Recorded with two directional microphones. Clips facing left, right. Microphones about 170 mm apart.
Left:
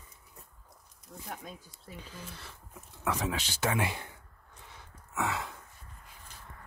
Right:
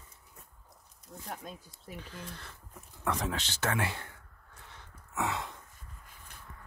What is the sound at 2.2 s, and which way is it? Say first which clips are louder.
Speech: right 1 dB; 5° left (ahead or behind).